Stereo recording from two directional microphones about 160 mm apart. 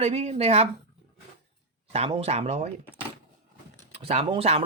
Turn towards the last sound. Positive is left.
turn(degrees=-35)  # may be behind; listen again after turning